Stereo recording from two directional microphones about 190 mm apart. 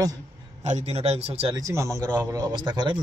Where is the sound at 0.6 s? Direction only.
35° right (ahead or behind).